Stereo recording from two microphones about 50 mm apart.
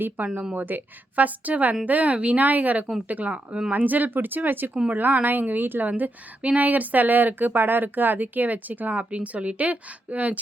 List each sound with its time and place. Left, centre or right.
0.2 s speech: right
3.7 s speech: right
5.9 s speech: right